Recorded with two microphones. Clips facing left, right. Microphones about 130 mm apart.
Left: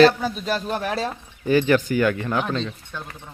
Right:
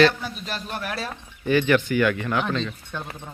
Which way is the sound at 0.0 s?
40° left (ahead or behind).